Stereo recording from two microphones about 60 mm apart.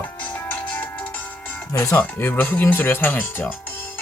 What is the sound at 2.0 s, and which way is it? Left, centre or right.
Speech, left.